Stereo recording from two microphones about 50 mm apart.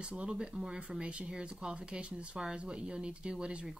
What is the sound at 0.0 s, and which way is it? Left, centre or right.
Speech, right.